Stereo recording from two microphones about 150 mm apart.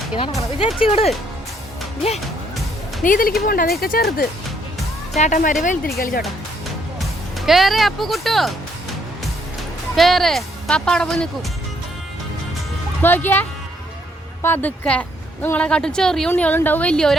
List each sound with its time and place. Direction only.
0.8 s speech: 40° left (ahead or behind)
3.0 s speech: 65° left (ahead or behind)
5.1 s speech: 50° left (ahead or behind)
5.6 s speech: 65° left (ahead or behind)
7.3 s speech: centre (ahead or behind)
9.9 s speech: centre (ahead or behind)
13.0 s speech: 15° left (ahead or behind)